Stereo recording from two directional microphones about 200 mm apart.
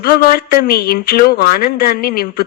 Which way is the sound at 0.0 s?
50° left (ahead or behind).